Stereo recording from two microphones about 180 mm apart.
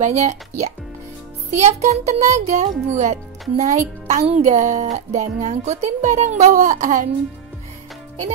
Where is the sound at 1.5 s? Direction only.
40° right (ahead or behind).